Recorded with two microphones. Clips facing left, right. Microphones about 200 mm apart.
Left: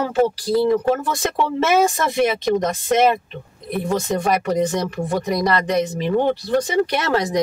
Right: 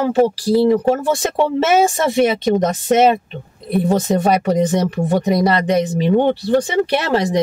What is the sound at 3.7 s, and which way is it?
A woman's voice, 35° right (ahead or behind).